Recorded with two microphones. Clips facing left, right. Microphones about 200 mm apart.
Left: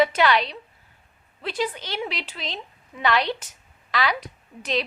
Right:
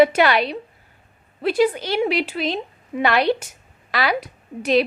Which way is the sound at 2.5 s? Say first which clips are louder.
Right 12 dB; 55° right (ahead or behind).